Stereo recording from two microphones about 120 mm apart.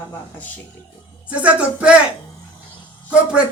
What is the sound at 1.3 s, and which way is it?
Music, 10° right (ahead or behind).